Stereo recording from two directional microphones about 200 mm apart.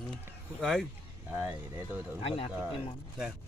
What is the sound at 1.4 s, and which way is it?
Speech, 10° right (ahead or behind).